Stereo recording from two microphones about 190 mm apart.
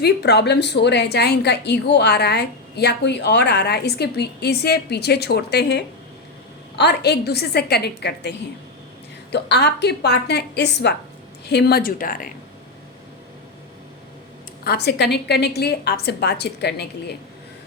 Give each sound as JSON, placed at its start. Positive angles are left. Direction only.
{"t": 0.0, "sound": "a woman's voice", "side_deg": 60}
{"t": 14.6, "sound": "a woman's voice", "side_deg": 55}